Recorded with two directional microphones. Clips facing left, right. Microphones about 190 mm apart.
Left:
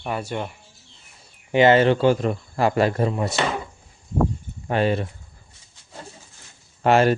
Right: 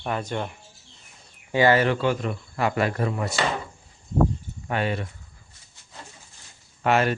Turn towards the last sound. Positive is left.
turn(degrees=30)  # may be behind; listen again after turning